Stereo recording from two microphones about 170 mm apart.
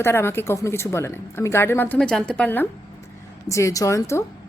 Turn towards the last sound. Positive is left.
turn(degrees=15)  # may be behind; listen again after turning